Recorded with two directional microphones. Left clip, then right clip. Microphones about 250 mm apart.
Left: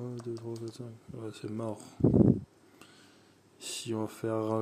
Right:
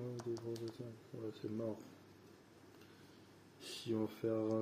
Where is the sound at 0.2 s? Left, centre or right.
Centre.